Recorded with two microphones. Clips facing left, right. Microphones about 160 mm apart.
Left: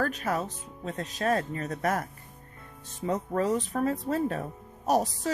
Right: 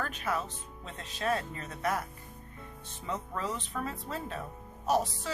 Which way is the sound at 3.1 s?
45° left (ahead or behind).